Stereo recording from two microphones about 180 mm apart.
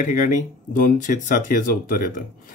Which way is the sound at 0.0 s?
50° left (ahead or behind).